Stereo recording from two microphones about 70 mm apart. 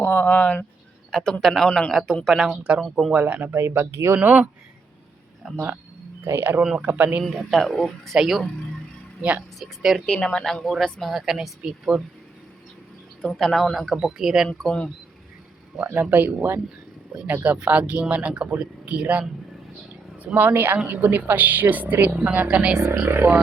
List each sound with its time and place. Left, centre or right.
0.0 s speech: left
1.1 s a man's voice: centre
2.5 s a woman's voice: centre
3.5 s speech: right
5.4 s speech: centre
6.2 s a woman's voice: right
7.3 s speech: centre
9.6 s speech: centre
10.1 s speech: centre
13.3 s speech: centre
14.6 s a man's voice: centre
15.8 s a woman's voice: right
20.3 s a woman's voice: right; by 22.9 s centre
23.0 s a woman's voice: right